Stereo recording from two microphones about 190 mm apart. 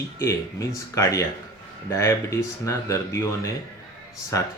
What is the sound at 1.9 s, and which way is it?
Speech, 15° left (ahead or behind).